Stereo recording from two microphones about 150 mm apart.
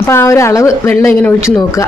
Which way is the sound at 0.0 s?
20° left (ahead or behind).